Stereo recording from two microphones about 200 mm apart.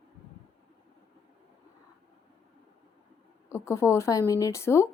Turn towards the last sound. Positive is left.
turn(degrees=15)  # may be behind; listen again after turning